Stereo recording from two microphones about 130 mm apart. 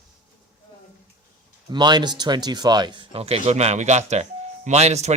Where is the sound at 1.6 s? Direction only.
35° right (ahead or behind).